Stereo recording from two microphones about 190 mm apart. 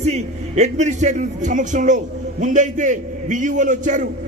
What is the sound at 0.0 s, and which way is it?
A man's voice, 35° right (ahead or behind).